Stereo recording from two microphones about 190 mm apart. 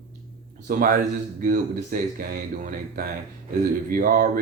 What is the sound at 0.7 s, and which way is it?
Speech, 50° right (ahead or behind).